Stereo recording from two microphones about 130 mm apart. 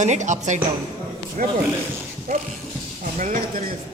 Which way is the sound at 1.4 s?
90° right.